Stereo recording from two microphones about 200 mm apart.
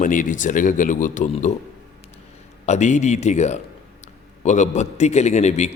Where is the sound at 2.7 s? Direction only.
35° left (ahead or behind).